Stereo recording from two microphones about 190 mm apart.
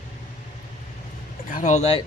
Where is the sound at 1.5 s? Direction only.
40° left (ahead or behind).